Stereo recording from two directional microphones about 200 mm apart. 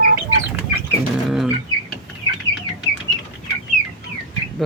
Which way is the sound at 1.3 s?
Centre (ahead or behind).